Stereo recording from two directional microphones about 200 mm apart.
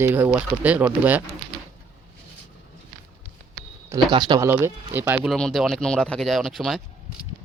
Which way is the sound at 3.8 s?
20° right (ahead or behind).